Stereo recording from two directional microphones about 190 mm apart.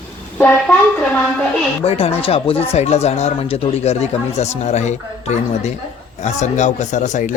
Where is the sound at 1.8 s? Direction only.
30° left (ahead or behind).